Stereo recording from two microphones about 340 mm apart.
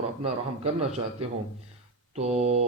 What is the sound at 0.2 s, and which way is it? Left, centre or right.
A man's voice, centre.